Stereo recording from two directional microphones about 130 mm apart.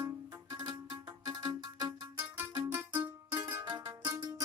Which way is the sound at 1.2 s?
30° right (ahead or behind).